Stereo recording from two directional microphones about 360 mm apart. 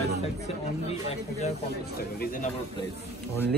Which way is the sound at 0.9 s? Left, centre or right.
Centre.